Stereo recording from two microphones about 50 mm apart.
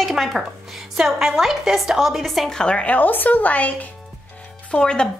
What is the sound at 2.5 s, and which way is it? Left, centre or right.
Speech, centre.